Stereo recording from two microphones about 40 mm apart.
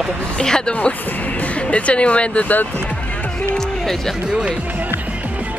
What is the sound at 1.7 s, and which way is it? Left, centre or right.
Speech, left.